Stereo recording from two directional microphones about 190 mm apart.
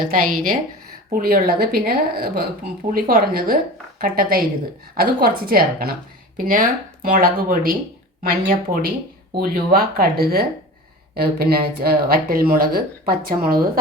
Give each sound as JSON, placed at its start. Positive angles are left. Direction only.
{"t": 0.0, "sound": "speech", "side_deg": -50}